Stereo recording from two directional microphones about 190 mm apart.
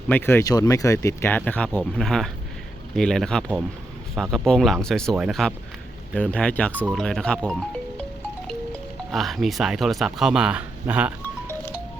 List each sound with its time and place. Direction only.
0.1 s speech: 10° left (ahead or behind); by 11.1 s 10° right (ahead or behind)